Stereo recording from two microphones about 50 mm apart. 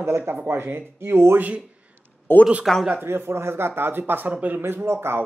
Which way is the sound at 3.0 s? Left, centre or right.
Right.